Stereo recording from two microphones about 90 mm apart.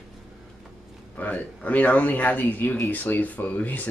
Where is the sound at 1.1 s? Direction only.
15° left (ahead or behind).